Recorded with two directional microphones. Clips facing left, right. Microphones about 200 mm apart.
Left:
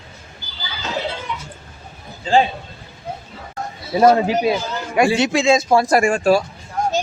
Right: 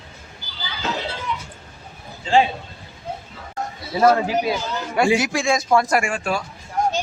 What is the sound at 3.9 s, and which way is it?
Speech, 25° left (ahead or behind).